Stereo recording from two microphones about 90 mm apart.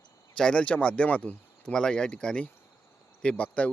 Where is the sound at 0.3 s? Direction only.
10° left (ahead or behind).